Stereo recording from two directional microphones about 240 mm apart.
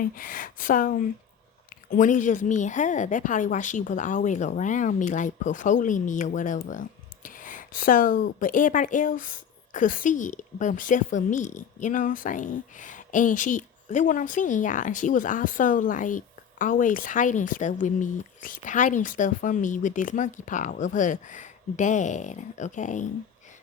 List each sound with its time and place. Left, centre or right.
0.0 s a woman's voice: left